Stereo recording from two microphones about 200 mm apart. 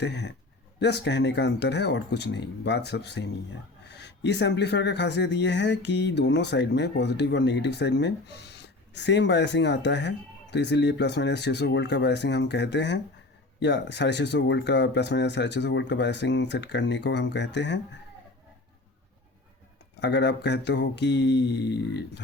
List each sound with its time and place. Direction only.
0.0 s speech: 60° left (ahead or behind)
20.0 s speech: 60° left (ahead or behind)